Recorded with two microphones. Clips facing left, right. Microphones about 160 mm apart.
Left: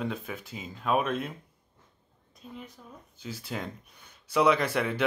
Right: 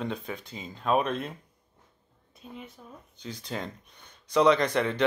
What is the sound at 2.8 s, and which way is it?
Speech, 20° right (ahead or behind).